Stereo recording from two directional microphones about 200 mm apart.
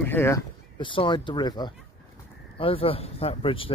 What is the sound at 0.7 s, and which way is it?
Speech, 25° left (ahead or behind).